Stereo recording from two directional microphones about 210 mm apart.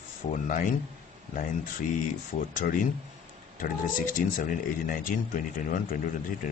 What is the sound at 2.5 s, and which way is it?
Speech, 40° left (ahead or behind).